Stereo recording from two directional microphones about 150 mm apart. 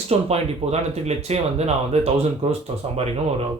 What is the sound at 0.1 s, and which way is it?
Speech, 45° right (ahead or behind).